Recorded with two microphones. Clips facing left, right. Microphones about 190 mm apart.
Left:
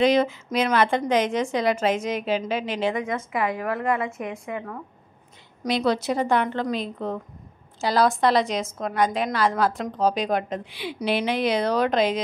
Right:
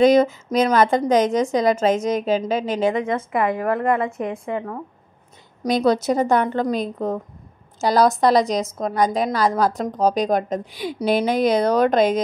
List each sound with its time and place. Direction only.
0.0 s a woman's voice: 45° right (ahead or behind)
4.5 s a woman's voice: 35° right (ahead or behind)